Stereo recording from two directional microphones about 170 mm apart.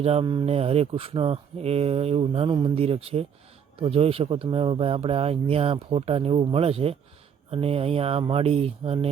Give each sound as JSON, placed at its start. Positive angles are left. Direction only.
{"t": 0.0, "sound": "speech", "side_deg": -35}